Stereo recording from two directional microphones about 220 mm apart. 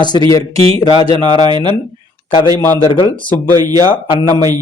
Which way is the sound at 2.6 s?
20° left (ahead or behind).